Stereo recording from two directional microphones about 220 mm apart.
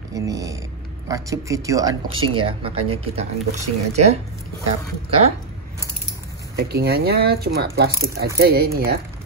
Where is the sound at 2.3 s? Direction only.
25° right (ahead or behind).